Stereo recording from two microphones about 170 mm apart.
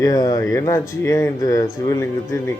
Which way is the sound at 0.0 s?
20° left (ahead or behind).